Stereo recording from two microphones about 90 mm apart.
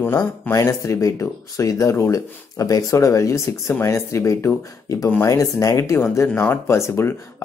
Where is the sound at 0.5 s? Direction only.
35° left (ahead or behind).